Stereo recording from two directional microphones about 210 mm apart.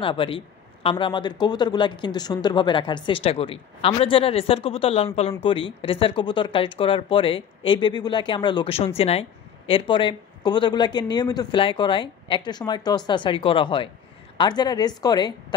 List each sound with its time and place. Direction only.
0.0 s speech: 25° left (ahead or behind)